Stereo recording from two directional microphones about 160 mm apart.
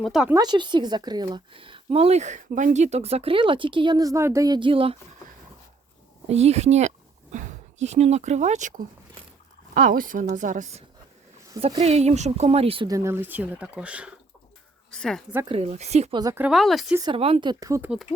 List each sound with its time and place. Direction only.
0.0 s speech: centre (ahead or behind)
0.3 s a woman's voice: 25° right (ahead or behind)
6.2 s speech: 40° right (ahead or behind)
11.5 s a woman's voice: 30° right (ahead or behind)
11.8 s speech: 40° right (ahead or behind)
12.9 s speech: 15° right (ahead or behind)
14.8 s speech: 5° left (ahead or behind)
15.4 s speech: 40° right (ahead or behind)
16.3 s speech: 5° right (ahead or behind)
17.0 s speech: 30° right (ahead or behind)
17.8 s speech: 5° right (ahead or behind)